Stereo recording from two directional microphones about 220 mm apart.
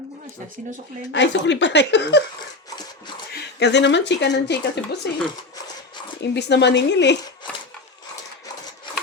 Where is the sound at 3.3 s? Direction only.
50° left (ahead or behind).